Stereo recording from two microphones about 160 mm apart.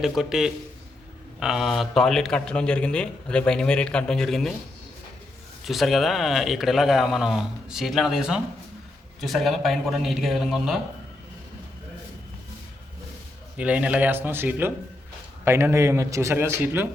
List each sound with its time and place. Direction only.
0.0 s a man's voice: centre (ahead or behind)
5.6 s a man's voice: centre (ahead or behind)
13.6 s a man's voice: 10° right (ahead or behind)